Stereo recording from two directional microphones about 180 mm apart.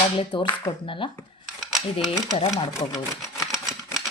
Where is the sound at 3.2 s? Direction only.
15° left (ahead or behind).